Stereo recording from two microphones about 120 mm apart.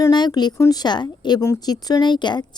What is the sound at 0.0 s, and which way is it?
Speech, 35° left (ahead or behind).